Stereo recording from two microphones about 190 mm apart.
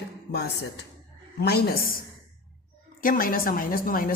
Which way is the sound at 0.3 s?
60° left (ahead or behind).